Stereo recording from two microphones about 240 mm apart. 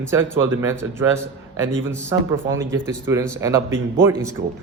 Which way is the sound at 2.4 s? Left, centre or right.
Right.